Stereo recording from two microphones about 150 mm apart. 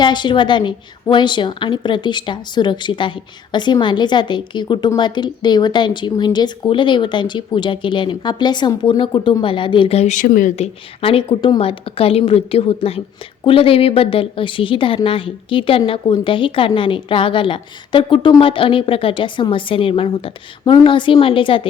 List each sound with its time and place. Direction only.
0.0 s a woman's voice: 30° left (ahead or behind); by 10.5 s 65° left (ahead or behind)
10.5 s a woman's voice: 40° left (ahead or behind)
11.3 s a woman's voice: 30° left (ahead or behind)